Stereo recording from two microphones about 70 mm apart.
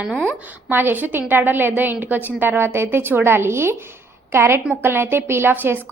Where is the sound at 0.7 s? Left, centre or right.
Right.